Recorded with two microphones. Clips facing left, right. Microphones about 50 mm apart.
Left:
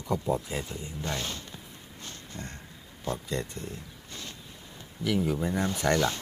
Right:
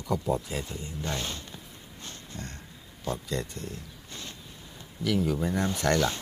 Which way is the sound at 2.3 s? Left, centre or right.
Left.